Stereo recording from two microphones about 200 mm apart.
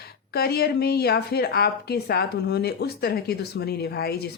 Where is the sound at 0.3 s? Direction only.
50° left (ahead or behind).